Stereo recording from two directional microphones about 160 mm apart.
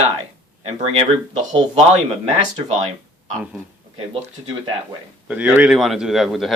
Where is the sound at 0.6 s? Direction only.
40° right (ahead or behind).